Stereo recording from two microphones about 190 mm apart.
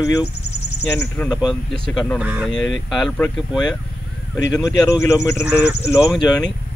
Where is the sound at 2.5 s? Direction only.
Centre (ahead or behind).